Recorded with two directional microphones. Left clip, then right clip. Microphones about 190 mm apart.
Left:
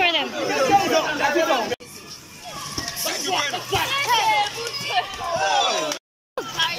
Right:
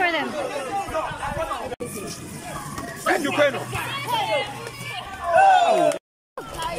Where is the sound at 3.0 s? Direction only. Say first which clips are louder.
Right 6 dB; 60° right (ahead or behind).